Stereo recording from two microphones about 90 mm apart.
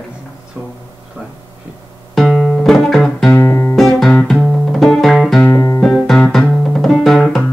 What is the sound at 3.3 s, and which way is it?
Music, 30° left (ahead or behind).